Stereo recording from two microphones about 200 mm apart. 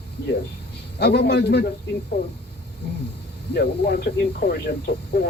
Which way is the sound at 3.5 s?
55° left (ahead or behind).